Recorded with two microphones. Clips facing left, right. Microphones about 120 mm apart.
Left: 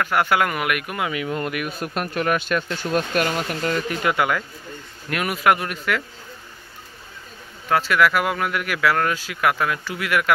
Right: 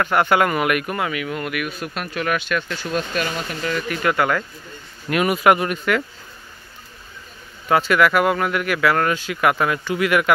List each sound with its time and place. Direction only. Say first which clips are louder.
0.0 s speech: right 3 dB; 5° left (ahead or behind)
1.1 s speech: even; 30° left (ahead or behind)
2.8 s speech: left 2 dB; 50° left (ahead or behind)
3.9 s speech: right 4 dB; 20° left (ahead or behind)
5.1 s speech: right 4 dB; centre (ahead or behind)
7.6 s speech: right 2 dB; 5° right (ahead or behind)